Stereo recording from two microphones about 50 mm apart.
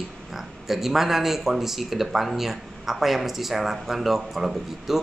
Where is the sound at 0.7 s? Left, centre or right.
Centre.